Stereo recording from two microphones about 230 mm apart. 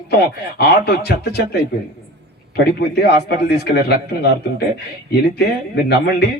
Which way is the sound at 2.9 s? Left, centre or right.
Left.